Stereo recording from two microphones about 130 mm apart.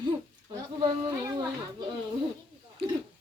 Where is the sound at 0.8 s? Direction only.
35° right (ahead or behind).